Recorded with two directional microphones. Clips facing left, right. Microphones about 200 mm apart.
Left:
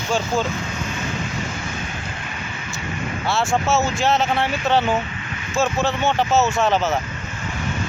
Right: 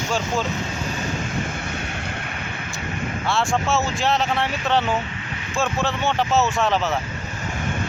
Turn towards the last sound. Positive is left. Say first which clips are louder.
# left 2 dB
turn(degrees=0)  # may be behind; listen again after turning